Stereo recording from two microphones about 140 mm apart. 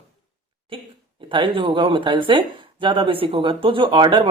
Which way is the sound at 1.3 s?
40° right (ahead or behind).